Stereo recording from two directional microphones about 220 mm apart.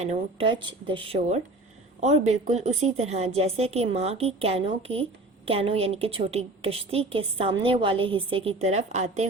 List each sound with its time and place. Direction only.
0.0 s a woman's voice: 30° right (ahead or behind)